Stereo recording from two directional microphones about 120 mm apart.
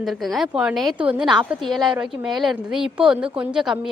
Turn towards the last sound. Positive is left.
turn(degrees=-5)  # may be behind; listen again after turning